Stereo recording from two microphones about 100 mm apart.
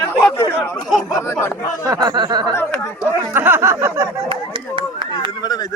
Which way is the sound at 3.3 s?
20° right (ahead or behind).